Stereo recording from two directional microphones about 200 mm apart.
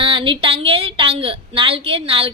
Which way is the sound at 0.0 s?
25° right (ahead or behind).